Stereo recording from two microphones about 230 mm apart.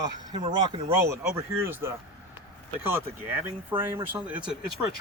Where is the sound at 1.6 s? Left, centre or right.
Centre.